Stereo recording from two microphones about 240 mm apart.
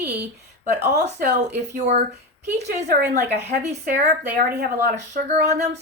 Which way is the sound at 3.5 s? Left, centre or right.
Right.